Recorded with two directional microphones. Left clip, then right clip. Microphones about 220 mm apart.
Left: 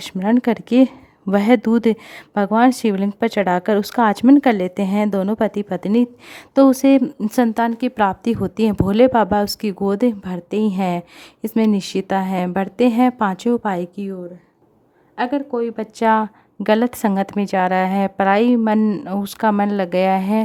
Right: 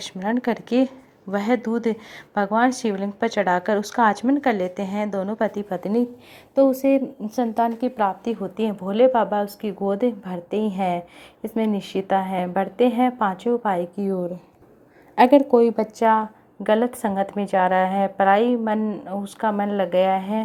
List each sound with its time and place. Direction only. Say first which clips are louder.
0.2 s speech: left 6 dB; 35° left (ahead or behind)
6.5 s speech: left 4 dB; 30° left (ahead or behind)
7.3 s a woman's voice: left 3 dB; 40° left (ahead or behind)
15.1 s a woman's voice: right 7 dB; 5° right (ahead or behind)
15.8 s speech: left 2 dB; 35° left (ahead or behind)